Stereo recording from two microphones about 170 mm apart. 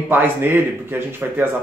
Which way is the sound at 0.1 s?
10° right (ahead or behind).